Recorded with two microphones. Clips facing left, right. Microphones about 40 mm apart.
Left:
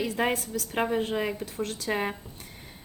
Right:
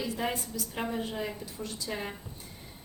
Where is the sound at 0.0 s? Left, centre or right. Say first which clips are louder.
Left 5 dB; left.